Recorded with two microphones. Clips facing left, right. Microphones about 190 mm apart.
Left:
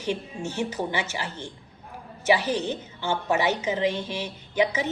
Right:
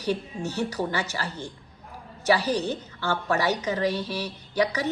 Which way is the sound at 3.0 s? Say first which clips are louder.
Left 1 dB; 20° left (ahead or behind).